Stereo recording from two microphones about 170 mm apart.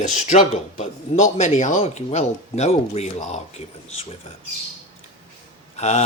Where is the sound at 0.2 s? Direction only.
45° left (ahead or behind).